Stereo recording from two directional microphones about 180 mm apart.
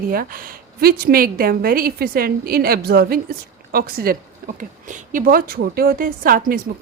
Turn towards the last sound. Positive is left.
turn(degrees=-55)  # may be behind; listen again after turning